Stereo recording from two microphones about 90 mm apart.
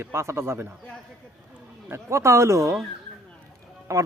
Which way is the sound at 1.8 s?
30° right (ahead or behind).